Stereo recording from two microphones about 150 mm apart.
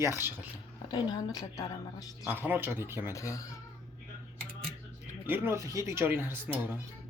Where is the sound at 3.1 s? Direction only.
20° left (ahead or behind).